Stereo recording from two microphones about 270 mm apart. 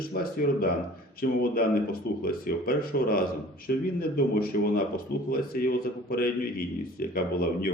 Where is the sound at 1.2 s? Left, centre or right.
Left.